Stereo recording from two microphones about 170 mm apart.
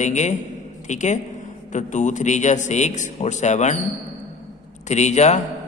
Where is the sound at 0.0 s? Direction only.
45° left (ahead or behind).